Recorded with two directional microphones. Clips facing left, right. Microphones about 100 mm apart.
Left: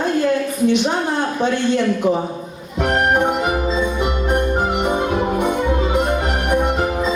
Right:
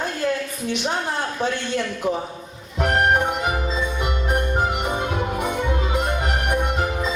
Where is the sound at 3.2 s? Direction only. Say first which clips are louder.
Left 5 dB; 45° left (ahead or behind).